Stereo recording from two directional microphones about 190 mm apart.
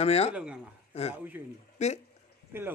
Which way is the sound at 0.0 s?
35° left (ahead or behind).